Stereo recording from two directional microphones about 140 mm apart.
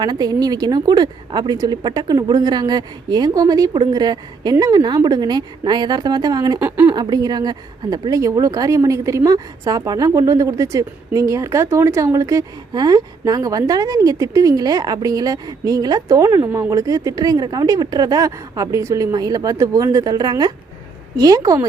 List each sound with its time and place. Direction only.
0.0 s speech: 30° right (ahead or behind)
6.6 s a woman's voice: 15° right (ahead or behind)
6.9 s speech: 30° right (ahead or behind)